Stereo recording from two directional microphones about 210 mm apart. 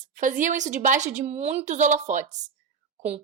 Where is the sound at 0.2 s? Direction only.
40° right (ahead or behind).